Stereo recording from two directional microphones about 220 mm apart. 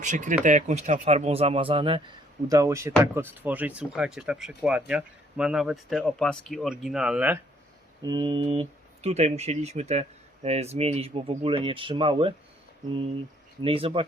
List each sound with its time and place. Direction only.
0.0 s speech: 35° right (ahead or behind); by 7.3 s 5° right (ahead or behind)
8.0 s speech: 20° right (ahead or behind)
13.6 s speech: 25° right (ahead or behind)